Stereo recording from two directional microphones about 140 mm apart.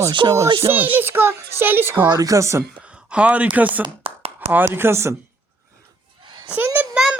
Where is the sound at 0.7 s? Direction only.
15° right (ahead or behind).